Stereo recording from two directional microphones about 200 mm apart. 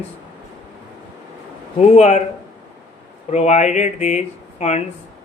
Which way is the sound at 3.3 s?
35° left (ahead or behind).